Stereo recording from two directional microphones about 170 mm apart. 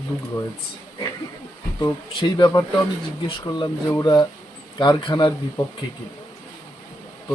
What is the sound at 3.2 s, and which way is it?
Speech, 25° left (ahead or behind).